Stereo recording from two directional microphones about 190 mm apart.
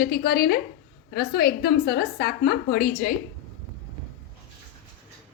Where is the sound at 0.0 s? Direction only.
55° left (ahead or behind).